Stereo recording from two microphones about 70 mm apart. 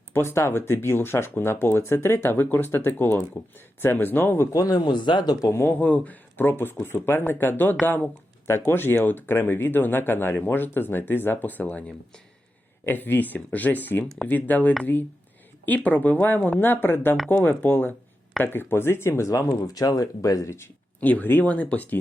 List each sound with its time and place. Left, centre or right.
0.1 s speech: left
4.5 s speech: left
5.5 s speech: left
5.8 s speech: left
8.4 s speech: left
14.0 s speech: centre
14.3 s speech: left
15.6 s speech: left
19.3 s speech: left
21.0 s speech: left